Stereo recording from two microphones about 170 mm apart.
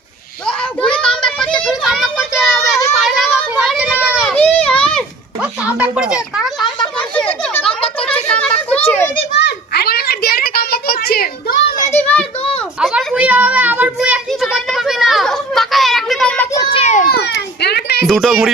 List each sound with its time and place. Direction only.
0.4 s a sound: 5° left (ahead or behind)
4.4 s children playing: 10° left (ahead or behind)
5.4 s speech: 10° right (ahead or behind)
6.9 s a sound: 5° left (ahead or behind)
9.3 s a sound: 80° left; by 11.9 s 65° left (ahead or behind)
11.9 s children playing: 10° left (ahead or behind)
12.9 s children playing: 5° right (ahead or behind)
16.5 s children playing: 20° left (ahead or behind)
16.7 s children playing: 45° left (ahead or behind)
17.1 s children playing: 70° left (ahead or behind)
18.0 s speech: centre (ahead or behind)